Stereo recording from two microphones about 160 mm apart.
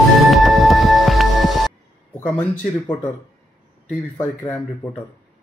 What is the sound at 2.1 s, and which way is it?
Speech, 10° left (ahead or behind).